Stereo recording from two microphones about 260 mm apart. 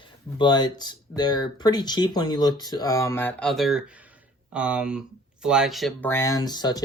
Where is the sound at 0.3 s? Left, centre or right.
Centre.